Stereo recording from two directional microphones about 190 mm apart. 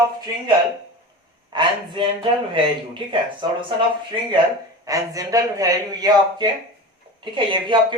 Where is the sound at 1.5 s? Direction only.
25° right (ahead or behind).